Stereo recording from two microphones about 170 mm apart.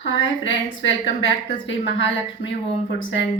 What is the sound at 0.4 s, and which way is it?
Speech, 90° left.